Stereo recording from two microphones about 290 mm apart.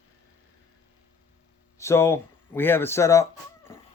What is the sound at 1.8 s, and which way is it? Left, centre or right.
Speech, centre.